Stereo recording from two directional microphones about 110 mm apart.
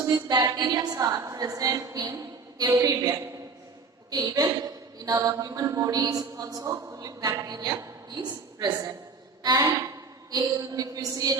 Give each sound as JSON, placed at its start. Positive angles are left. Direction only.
{"t": 0.0, "sound": "a woman's voice", "side_deg": -35}